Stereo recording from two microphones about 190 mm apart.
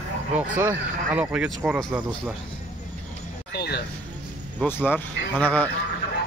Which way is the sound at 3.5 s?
60° left (ahead or behind).